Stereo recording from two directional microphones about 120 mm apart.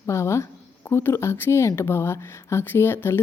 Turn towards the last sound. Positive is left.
turn(degrees=20)  # may be behind; listen again after turning